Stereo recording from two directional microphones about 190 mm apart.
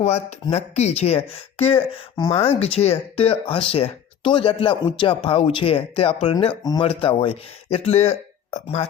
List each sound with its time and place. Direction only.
0.0 s speech: 35° left (ahead or behind)